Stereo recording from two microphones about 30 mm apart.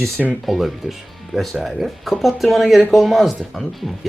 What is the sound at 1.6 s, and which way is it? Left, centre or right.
Speech, centre.